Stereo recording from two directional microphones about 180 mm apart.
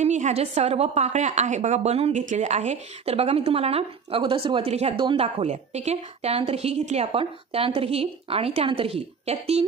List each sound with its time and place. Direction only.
0.0 s a woman's voice: 40° right (ahead or behind)